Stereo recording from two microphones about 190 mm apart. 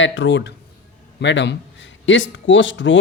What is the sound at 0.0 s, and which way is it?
A man's voice, 90° left.